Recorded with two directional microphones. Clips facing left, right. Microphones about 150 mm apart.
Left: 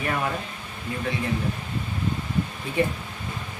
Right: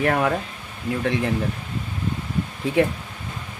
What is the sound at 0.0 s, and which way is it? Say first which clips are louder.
Speech: right 7 dB; 65° right (ahead or behind).